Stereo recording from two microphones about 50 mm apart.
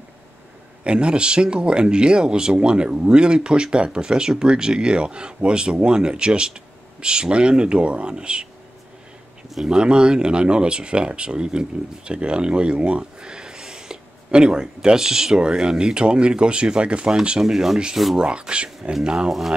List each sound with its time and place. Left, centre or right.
0.8 s speech: right
9.7 s speech: centre
17.4 s speech: centre
18.1 s speech: centre